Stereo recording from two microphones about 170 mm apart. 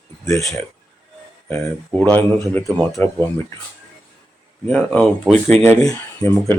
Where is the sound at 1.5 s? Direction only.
10° left (ahead or behind).